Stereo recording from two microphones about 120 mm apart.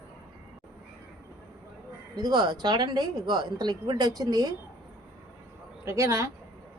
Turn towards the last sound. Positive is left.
turn(degrees=-25)  # may be behind; listen again after turning